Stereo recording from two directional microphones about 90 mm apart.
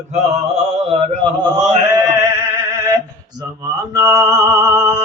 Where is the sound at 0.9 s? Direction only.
75° right (ahead or behind); by 1.5 s 60° right (ahead or behind).